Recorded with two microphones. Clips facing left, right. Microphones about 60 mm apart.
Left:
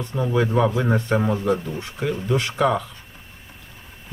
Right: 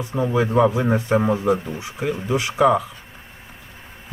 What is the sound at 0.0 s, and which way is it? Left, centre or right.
Speech, centre.